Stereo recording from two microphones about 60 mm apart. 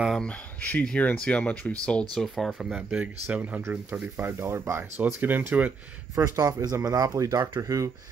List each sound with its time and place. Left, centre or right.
0.2 s speech: left
2.1 s speech: centre
2.7 s speech: centre
4.4 s speech: right
4.9 s speech: right
6.1 s speech: right